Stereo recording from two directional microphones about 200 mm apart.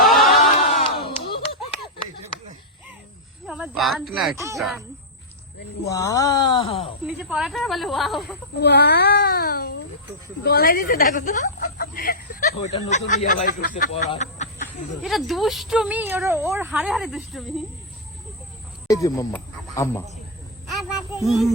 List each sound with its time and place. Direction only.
0.0 s a sound: centre (ahead or behind)
0.6 s crowd: 30° left (ahead or behind)
1.1 s clapping: 25° left (ahead or behind)
3.4 s speech: 5° right (ahead or behind)
4.4 s speech: 15° right (ahead or behind)
5.9 s speech: 15° left (ahead or behind)
7.1 s speech: centre (ahead or behind)
8.5 s speech: 55° left (ahead or behind)
14.1 s a sound: 35° left (ahead or behind)
15.0 s speech: centre (ahead or behind)
18.9 s speech: 15° left (ahead or behind)
21.2 s speech: centre (ahead or behind)